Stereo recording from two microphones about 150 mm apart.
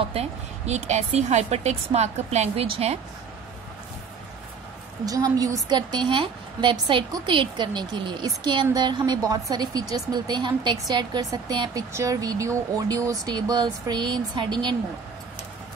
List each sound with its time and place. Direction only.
0.1 s a woman's voice: 45° right (ahead or behind)
5.0 s speech: 25° right (ahead or behind)